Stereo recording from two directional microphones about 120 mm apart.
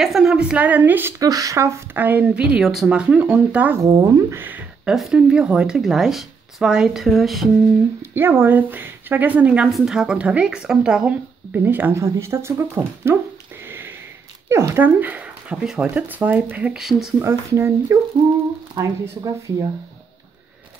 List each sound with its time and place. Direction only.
0.0 s speech: 5° right (ahead or behind)
1.2 s speech: 30° right (ahead or behind)
4.8 s speech: 5° right (ahead or behind)
8.0 s speech: 20° right (ahead or behind)
13.7 s sniff: 15° right (ahead or behind)
14.5 s speech: 20° right (ahead or behind); by 17.1 s 5° right (ahead or behind)
17.2 s speech: 25° right (ahead or behind)